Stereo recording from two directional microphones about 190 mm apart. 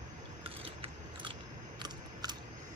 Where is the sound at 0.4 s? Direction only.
30° right (ahead or behind).